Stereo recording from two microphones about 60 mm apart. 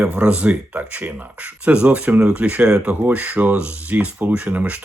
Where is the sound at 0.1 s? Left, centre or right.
Centre.